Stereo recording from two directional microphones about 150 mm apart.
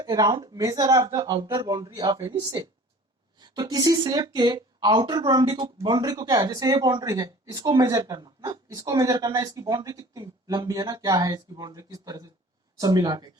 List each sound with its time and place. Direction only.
0.0 s speech: 30° right (ahead or behind)